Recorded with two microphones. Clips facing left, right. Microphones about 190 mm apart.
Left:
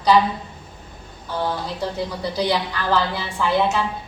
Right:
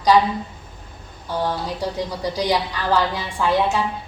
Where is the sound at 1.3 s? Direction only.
10° right (ahead or behind).